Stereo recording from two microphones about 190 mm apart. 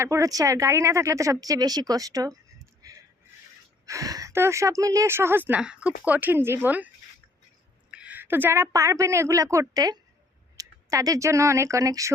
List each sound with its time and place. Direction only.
0.0 s speech: 15° right (ahead or behind)
3.8 s a woman's voice: 15° right (ahead or behind)